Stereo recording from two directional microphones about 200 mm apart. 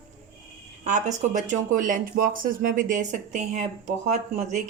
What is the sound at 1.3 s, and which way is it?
Speech, 40° right (ahead or behind).